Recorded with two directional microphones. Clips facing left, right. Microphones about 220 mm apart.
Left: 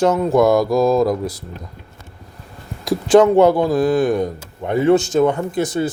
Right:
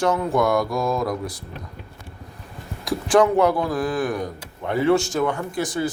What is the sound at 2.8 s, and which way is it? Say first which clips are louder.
Speech: left 6 dB; 25° left (ahead or behind).